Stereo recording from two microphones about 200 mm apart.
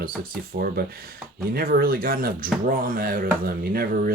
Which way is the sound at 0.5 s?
50° right (ahead or behind).